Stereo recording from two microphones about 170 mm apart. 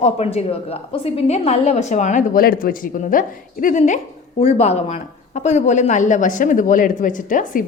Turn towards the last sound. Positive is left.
turn(degrees=50)  # may be behind; listen again after turning